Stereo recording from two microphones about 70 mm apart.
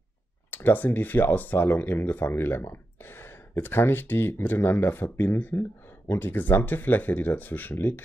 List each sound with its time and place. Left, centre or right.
0.5 s speech: left